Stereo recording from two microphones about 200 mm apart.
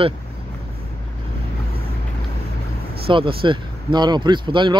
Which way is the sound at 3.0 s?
25° right (ahead or behind).